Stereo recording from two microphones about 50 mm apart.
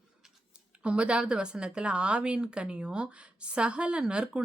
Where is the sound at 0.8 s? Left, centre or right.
Right.